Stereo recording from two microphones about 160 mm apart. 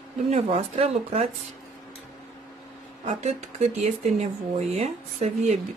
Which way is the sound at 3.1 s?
45° right (ahead or behind).